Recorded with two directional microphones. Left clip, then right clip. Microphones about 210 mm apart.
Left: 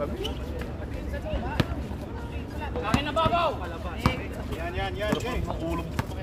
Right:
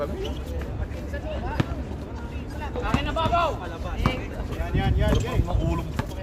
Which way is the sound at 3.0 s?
10° right (ahead or behind).